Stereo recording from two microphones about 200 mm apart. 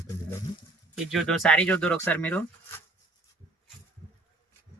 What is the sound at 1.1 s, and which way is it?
Speech, centre (ahead or behind).